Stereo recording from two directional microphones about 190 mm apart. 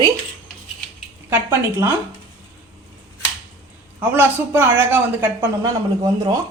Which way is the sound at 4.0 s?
10° right (ahead or behind).